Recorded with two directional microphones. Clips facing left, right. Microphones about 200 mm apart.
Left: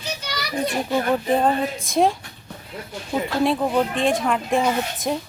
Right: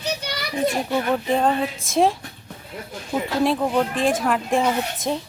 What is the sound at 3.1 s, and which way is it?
Speech, centre (ahead or behind).